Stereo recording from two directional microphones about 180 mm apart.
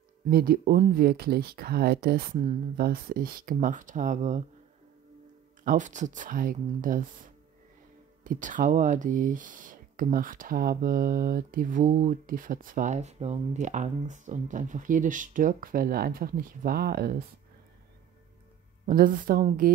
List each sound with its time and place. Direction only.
0.3 s speech: 55° right (ahead or behind)
5.6 s speech: 45° right (ahead or behind)
18.9 s speech: 50° right (ahead or behind)